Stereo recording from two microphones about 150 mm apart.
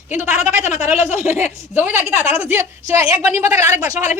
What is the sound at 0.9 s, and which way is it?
Speech, 50° left (ahead or behind).